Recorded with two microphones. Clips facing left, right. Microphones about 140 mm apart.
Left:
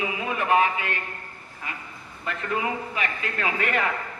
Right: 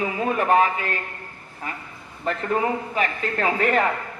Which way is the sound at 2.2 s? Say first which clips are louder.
Right 5 dB; 40° right (ahead or behind).